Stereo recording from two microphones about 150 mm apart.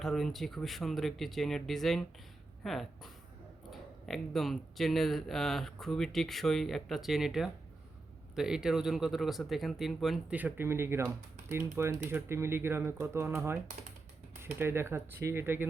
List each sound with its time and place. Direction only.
0.0 s speech: centre (ahead or behind); by 15.6 s 15° right (ahead or behind)